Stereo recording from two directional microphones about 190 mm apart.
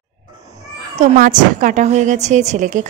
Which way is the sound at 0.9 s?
45° right (ahead or behind).